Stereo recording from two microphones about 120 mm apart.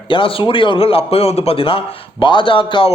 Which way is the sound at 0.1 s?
45° left (ahead or behind).